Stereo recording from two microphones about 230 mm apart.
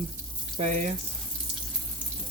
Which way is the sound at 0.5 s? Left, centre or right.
Right.